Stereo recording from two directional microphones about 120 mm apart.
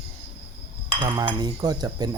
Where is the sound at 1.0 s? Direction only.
35° right (ahead or behind).